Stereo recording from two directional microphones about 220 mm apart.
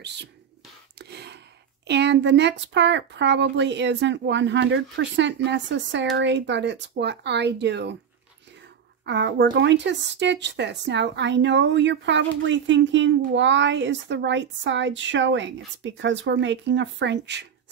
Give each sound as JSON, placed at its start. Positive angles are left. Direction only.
{"t": 0.0, "sound": "speech", "side_deg": -50}
{"t": 0.9, "sound": "a sound", "side_deg": -50}
{"t": 1.9, "sound": "speech", "side_deg": -50}
{"t": 9.0, "sound": "speech", "side_deg": -50}